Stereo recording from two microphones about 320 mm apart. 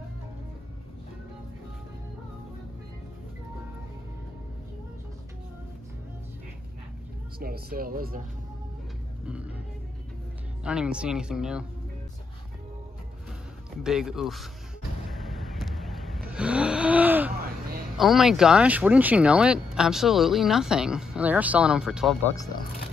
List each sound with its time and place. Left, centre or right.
7.3 s speech: right
9.2 s music: centre
10.6 s speech: centre
13.8 s speech: centre
15.0 s vehicle: centre
17.9 s speech: centre